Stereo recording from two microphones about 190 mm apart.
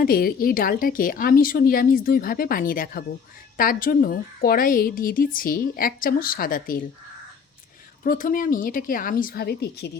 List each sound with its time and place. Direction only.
0.0 s a woman's voice: 50° left (ahead or behind)
8.0 s a woman's voice: 45° left (ahead or behind)